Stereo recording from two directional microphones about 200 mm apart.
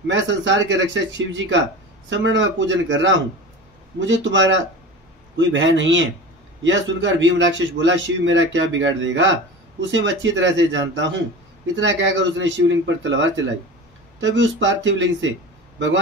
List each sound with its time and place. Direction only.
0.1 s a man's voice: 65° right (ahead or behind)